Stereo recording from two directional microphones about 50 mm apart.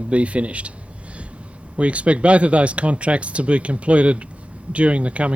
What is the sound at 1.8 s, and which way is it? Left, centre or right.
Speech, right.